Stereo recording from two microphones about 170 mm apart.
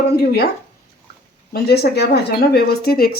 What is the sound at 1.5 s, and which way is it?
Speech, 70° left (ahead or behind).